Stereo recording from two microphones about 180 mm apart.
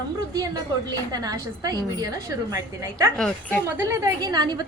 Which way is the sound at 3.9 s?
20° right (ahead or behind).